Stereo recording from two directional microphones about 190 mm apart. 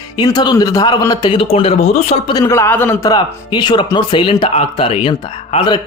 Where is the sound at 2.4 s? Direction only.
15° left (ahead or behind).